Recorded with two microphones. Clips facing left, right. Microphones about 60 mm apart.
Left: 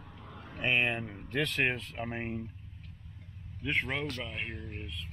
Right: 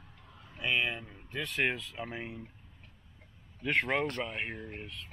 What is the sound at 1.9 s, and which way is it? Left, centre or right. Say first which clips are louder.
Speech: left 3 dB; left.